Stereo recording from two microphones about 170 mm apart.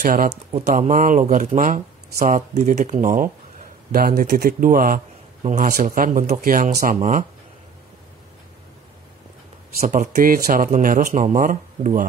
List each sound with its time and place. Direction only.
0.0 s speech: 55° right (ahead or behind)
5.4 s speech: 45° right (ahead or behind)
9.8 s speech: 45° right (ahead or behind)